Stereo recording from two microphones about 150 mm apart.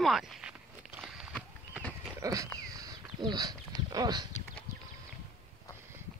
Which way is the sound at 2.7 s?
25° right (ahead or behind).